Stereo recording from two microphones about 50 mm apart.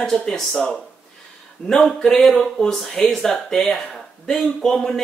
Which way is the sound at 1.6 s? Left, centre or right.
Left.